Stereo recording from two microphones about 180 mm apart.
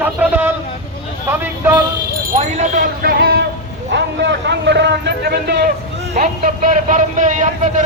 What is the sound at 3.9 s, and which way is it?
A man's voice, 75° right (ahead or behind).